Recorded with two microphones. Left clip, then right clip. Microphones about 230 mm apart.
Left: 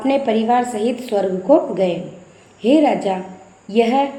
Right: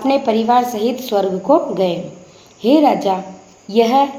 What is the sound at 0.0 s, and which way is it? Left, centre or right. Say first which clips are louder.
A woman's voice: right 2 dB; centre.